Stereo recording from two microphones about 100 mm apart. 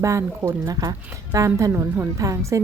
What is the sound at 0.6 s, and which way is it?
Speech, 40° right (ahead or behind).